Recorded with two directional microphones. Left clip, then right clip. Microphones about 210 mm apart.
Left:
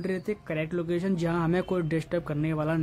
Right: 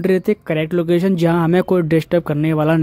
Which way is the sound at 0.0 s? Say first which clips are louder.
Right 15 dB; 40° right (ahead or behind).